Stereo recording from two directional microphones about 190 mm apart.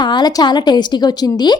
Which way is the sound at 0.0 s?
20° left (ahead or behind).